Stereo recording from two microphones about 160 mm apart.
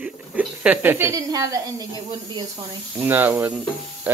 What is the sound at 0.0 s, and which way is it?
Speech, 10° right (ahead or behind).